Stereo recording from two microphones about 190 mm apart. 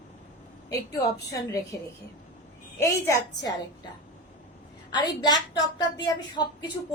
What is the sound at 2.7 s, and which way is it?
Speech, 15° left (ahead or behind).